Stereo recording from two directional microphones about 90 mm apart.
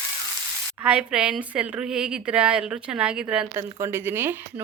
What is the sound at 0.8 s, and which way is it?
A woman's voice, 10° right (ahead or behind).